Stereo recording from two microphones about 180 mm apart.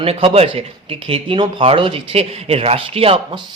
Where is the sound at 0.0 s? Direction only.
30° right (ahead or behind).